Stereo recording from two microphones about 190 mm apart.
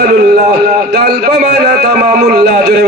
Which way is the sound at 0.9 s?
60° right (ahead or behind).